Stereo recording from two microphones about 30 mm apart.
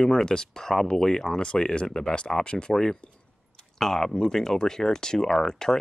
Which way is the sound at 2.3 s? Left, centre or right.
Centre.